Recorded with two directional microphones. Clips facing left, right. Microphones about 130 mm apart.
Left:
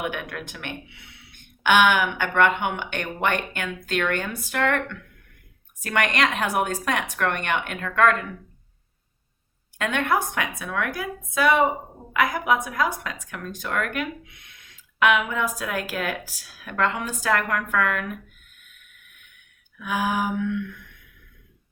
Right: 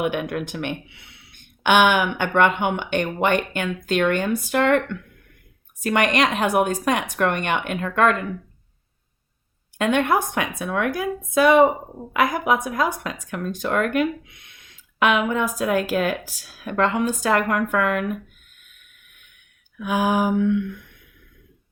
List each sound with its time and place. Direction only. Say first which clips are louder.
0.0 s speech: right 7 dB; 20° right (ahead or behind)
5.8 s speech: right 4 dB; 20° right (ahead or behind)
9.7 s speech: right 4 dB; 20° right (ahead or behind)
19.8 s speech: right 4 dB; 20° right (ahead or behind)